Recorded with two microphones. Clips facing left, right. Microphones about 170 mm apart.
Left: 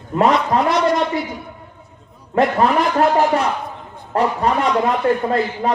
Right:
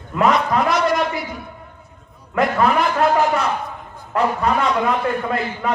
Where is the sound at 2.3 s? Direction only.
30° left (ahead or behind).